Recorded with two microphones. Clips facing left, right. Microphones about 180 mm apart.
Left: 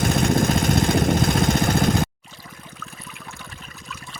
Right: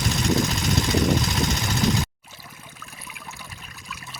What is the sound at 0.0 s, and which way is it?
Vehicle, 55° left (ahead or behind).